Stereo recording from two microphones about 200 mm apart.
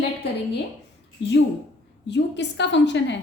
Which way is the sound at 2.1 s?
60° left (ahead or behind).